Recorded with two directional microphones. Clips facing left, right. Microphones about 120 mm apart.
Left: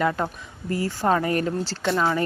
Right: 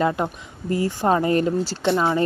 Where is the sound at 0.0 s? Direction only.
20° right (ahead or behind).